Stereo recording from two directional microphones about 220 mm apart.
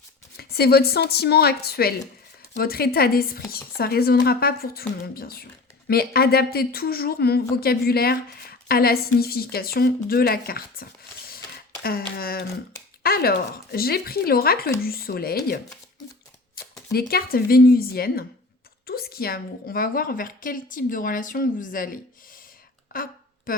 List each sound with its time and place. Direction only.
0.3 s speech: 45° left (ahead or behind)
16.9 s a woman's voice: 45° left (ahead or behind)